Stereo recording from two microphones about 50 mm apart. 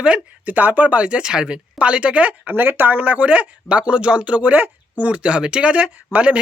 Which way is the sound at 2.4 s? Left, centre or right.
Right.